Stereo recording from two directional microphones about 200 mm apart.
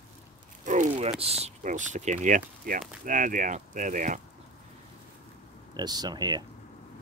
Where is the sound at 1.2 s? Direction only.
30° right (ahead or behind).